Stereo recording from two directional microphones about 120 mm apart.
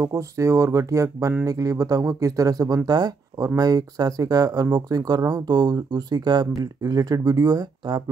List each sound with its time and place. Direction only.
0.0 s speech: 30° right (ahead or behind)